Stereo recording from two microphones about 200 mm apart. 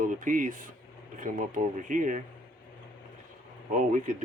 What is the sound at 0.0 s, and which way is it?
Speech, 40° right (ahead or behind).